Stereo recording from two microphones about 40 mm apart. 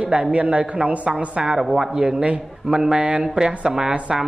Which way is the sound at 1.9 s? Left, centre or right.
Centre.